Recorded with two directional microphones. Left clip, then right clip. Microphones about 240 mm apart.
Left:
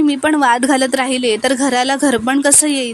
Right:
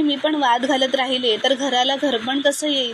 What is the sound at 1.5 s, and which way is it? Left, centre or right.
Speech, left.